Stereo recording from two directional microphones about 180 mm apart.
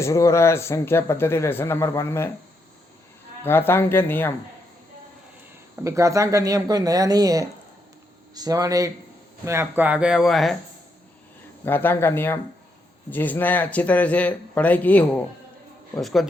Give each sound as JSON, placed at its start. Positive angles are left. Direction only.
{"t": 0.0, "sound": "speech", "side_deg": 15}
{"t": 3.4, "sound": "speech", "side_deg": 10}
{"t": 5.8, "sound": "speech", "side_deg": -15}
{"t": 11.6, "sound": "speech", "side_deg": 10}